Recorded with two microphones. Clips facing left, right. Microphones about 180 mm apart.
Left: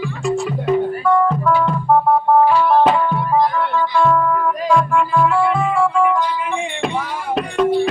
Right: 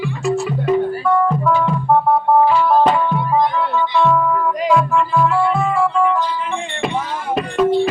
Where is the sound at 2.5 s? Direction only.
5° left (ahead or behind).